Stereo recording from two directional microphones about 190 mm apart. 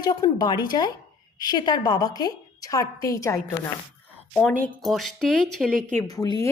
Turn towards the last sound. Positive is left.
turn(degrees=20)  # may be behind; listen again after turning